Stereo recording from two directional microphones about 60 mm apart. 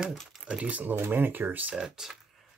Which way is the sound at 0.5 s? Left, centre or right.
Right.